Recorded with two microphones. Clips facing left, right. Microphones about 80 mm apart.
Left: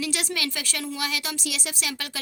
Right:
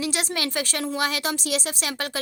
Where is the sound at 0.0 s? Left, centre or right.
Right.